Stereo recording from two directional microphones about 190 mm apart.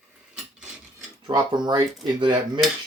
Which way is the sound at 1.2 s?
25° right (ahead or behind).